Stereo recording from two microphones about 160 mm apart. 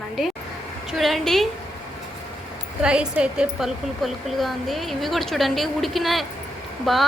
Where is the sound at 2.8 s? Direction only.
5° right (ahead or behind).